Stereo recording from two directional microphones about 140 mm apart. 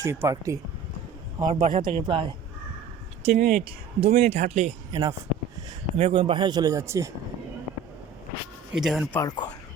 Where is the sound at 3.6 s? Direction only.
40° right (ahead or behind).